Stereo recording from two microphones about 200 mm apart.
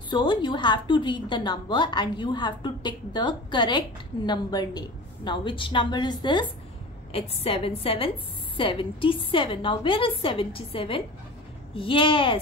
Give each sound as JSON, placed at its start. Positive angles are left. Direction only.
{"t": 0.1, "sound": "a woman's voice", "side_deg": 25}